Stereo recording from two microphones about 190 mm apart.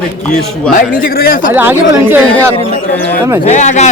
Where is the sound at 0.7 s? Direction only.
50° left (ahead or behind).